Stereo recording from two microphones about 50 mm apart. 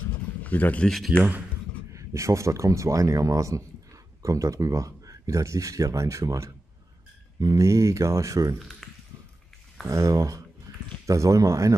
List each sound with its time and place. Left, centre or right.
0.4 s speech: left
1.9 s speech: right
8.5 s a sound: centre
9.8 s speech: right